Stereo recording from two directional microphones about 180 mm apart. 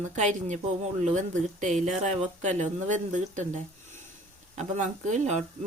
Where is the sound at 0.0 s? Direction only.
40° right (ahead or behind).